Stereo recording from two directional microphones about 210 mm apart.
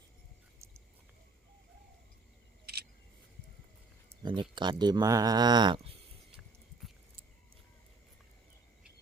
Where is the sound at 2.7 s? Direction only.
50° right (ahead or behind).